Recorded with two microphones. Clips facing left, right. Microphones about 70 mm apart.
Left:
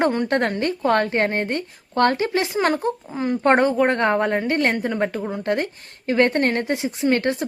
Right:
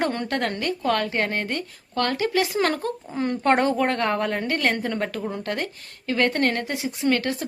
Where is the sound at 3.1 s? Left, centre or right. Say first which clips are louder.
Left 3 dB; centre.